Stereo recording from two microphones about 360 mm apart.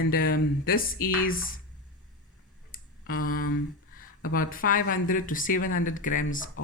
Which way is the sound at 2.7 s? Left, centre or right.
Left.